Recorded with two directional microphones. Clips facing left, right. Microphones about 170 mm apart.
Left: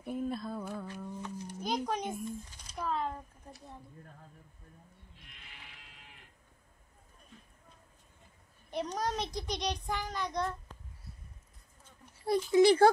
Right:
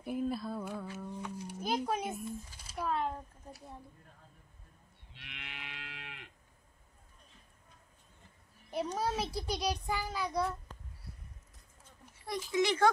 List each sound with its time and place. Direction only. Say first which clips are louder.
0.0 s humming: right 1 dB; 5° right (ahead or behind)
1.9 s a sound: even; 5° right (ahead or behind)
5.1 s moo: right 11 dB; 80° right
8.6 s a child's voice: even; 5° right (ahead or behind)
12.4 s a child's voice: left 6 dB; 35° left (ahead or behind)